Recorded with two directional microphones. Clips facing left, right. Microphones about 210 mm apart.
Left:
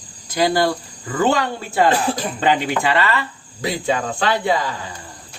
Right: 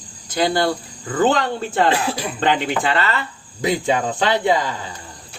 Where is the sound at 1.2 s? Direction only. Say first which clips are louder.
Right 1 dB; 10° left (ahead or behind).